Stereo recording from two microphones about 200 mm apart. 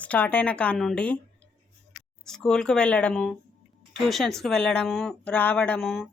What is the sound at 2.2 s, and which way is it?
Speech, 5° left (ahead or behind).